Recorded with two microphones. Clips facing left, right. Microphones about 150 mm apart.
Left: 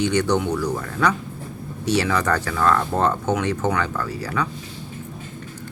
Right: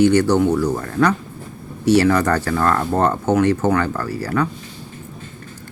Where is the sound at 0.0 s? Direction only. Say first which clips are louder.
Right 6 dB; 5° right (ahead or behind).